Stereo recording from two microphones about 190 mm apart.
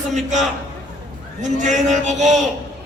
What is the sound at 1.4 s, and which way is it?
Child singing, 40° right (ahead or behind).